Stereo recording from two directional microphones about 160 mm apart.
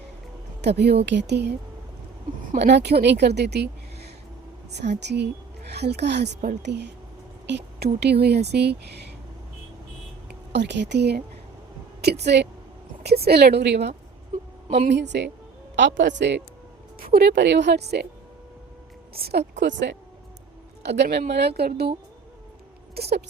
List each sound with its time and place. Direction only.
0.6 s a woman's voice: 90° right
2.6 s a woman's voice: 90° right
7.4 s a sound: 90° right
7.9 s a woman's voice: 90° right
10.2 s a woman's voice: 90° right
14.7 s a woman's voice: 40° right (ahead or behind)
14.9 s a woman's voice: 90° right
17.0 s a woman's voice: 75° right (ahead or behind); by 18.0 s 90° right
19.1 s a woman's voice: 80° right
23.0 s a sound: 85° right